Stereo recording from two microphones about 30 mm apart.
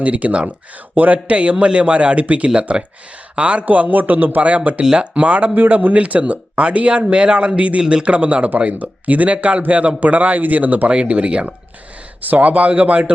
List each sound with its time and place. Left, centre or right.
0.0 s speech: right
1.4 s speech: right
3.7 s a man's voice: right
4.4 s speech: right
5.5 s speech: right
7.8 s speech: right
8.0 s speech: right
8.7 s speech: right
10.9 s speech: right
12.3 s speech: right